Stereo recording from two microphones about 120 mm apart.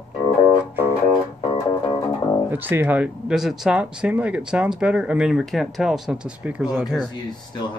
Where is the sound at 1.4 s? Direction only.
40° left (ahead or behind).